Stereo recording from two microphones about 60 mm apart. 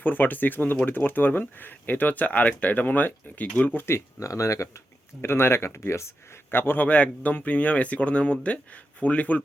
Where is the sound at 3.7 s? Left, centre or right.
Left.